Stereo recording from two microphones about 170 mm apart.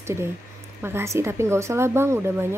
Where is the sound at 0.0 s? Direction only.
15° right (ahead or behind).